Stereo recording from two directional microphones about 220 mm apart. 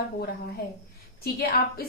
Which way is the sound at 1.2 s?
45° left (ahead or behind).